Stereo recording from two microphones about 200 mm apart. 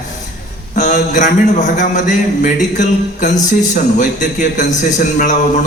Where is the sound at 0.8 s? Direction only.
40° left (ahead or behind).